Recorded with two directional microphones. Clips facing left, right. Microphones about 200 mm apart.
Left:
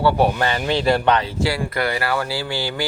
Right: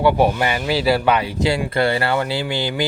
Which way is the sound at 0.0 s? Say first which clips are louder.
Right 1 dB; 15° right (ahead or behind).